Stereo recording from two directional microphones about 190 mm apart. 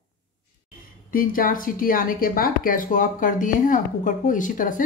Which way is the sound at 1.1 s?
50° left (ahead or behind).